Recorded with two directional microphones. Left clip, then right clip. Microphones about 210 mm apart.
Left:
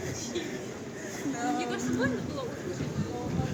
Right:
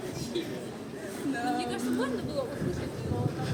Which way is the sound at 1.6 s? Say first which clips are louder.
Left 1 dB; 25° right (ahead or behind).